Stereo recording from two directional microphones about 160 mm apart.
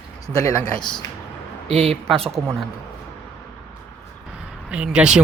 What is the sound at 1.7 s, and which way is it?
Speech, 40° right (ahead or behind).